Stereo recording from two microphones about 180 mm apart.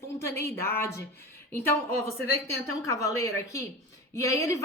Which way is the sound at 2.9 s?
15° left (ahead or behind).